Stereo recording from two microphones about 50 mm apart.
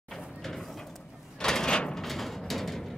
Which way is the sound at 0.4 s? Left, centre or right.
Centre.